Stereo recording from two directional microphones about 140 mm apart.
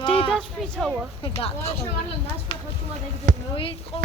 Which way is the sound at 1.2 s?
40° left (ahead or behind).